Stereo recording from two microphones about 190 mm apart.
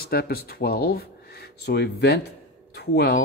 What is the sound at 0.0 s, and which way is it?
Speech, 55° left (ahead or behind).